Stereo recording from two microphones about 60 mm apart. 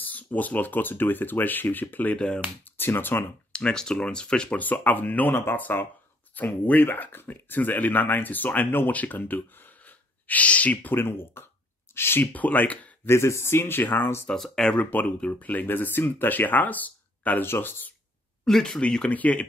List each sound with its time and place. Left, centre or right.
0.0 s speech: left
2.1 s speech: centre
2.8 s speech: left
3.5 s speech: centre
4.6 s speech: left
11.0 s speech: left
12.3 s speech: left
13.0 s speech: left
14.3 s speech: centre
14.8 s speech: left
17.5 s speech: left
18.4 s speech: centre
19.0 s speech: left